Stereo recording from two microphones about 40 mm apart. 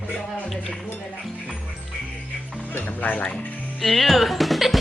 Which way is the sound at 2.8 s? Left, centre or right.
Left.